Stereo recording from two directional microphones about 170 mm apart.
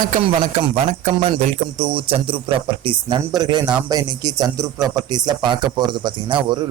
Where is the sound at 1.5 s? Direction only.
35° right (ahead or behind).